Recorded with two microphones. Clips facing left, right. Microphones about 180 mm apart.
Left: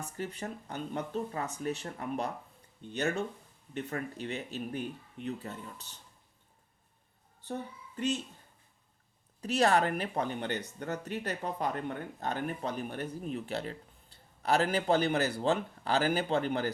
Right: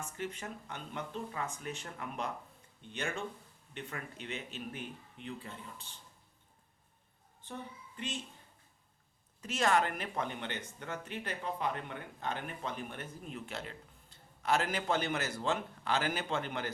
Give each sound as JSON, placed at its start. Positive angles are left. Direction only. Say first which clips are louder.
{"t": 0.0, "sound": "speech", "louder": "left 3 dB", "side_deg": 35}
{"t": 7.4, "sound": "speech", "louder": "left 6 dB", "side_deg": 40}
{"t": 9.4, "sound": "speech", "louder": "left 4 dB", "side_deg": 35}